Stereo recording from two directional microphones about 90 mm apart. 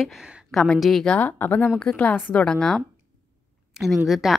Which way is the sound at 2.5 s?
5° left (ahead or behind).